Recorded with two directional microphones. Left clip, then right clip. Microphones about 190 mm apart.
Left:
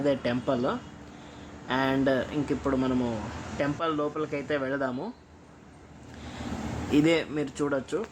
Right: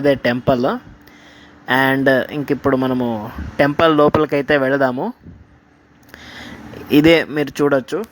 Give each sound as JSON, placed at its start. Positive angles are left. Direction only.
{"t": 0.0, "sound": "speech", "side_deg": -40}
{"t": 3.6, "sound": "speech", "side_deg": -50}
{"t": 6.9, "sound": "speech", "side_deg": -45}